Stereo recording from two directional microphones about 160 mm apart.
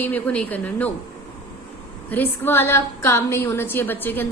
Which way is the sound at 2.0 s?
10° left (ahead or behind).